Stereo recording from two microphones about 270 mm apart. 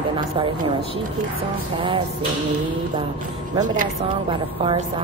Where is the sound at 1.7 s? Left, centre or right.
Centre.